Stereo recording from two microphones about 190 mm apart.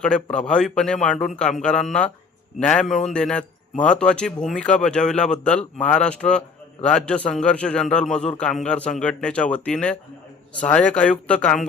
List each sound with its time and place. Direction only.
0.0 s a man's voice: 5° left (ahead or behind)